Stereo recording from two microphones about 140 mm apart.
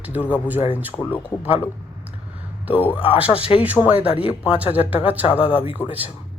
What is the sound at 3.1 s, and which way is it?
Speech, 10° right (ahead or behind).